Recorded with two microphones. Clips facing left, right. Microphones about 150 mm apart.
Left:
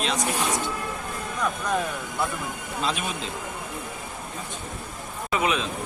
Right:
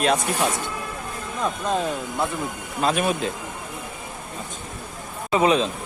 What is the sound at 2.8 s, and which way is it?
Speech, 50° right (ahead or behind).